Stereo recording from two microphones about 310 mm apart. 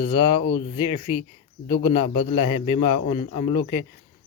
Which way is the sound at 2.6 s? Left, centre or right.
Left.